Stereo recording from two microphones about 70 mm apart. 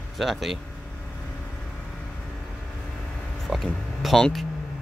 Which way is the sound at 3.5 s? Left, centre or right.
Centre.